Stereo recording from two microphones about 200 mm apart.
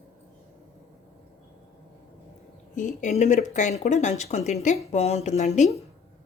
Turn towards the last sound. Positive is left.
turn(degrees=35)  # may be behind; listen again after turning